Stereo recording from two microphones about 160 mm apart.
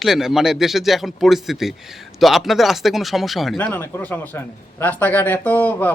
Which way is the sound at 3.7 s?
15° left (ahead or behind).